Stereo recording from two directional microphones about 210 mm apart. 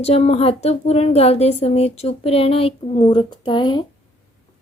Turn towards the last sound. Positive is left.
turn(degrees=20)  # may be behind; listen again after turning